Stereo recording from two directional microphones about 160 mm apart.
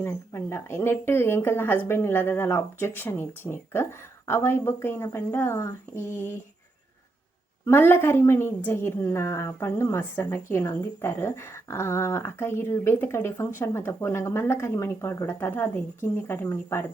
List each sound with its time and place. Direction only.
0.0 s a woman's voice: 15° left (ahead or behind)
7.6 s a woman's voice: 15° left (ahead or behind)